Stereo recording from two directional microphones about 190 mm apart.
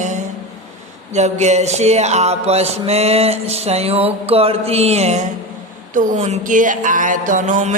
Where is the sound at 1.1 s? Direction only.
35° right (ahead or behind).